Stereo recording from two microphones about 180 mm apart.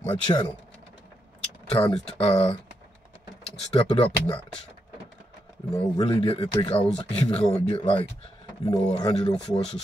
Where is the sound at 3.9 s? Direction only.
30° left (ahead or behind).